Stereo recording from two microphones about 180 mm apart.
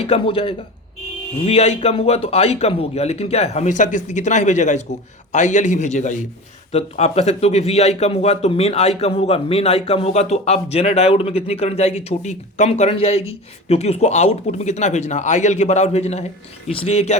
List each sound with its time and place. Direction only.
0.0 s a man's voice: 30° left (ahead or behind)